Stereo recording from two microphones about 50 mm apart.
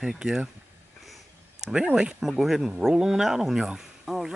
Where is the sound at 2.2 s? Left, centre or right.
Centre.